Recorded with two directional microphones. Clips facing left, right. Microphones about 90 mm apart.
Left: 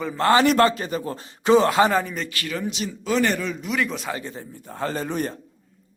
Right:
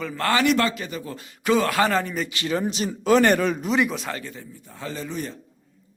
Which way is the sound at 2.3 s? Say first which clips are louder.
Right 3 dB; 25° right (ahead or behind).